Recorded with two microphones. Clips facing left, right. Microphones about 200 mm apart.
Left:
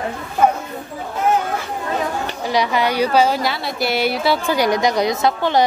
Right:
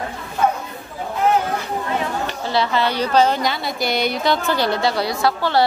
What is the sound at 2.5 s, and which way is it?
A woman's voice, 15° left (ahead or behind).